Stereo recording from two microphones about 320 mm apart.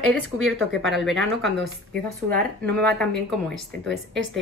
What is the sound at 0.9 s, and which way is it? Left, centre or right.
Speech, centre.